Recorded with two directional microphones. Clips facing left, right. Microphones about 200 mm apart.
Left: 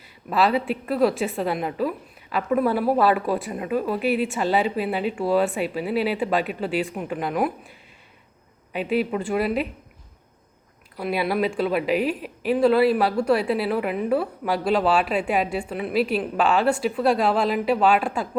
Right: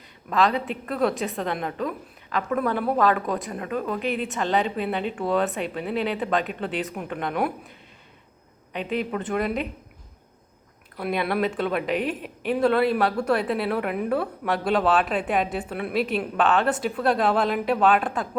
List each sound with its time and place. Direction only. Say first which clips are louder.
0.3 s a woman's voice: left 2 dB; 5° left (ahead or behind)
8.7 s a woman's voice: left 4 dB; 5° left (ahead or behind)
10.9 s a woman's voice: left 1 dB; 5° left (ahead or behind)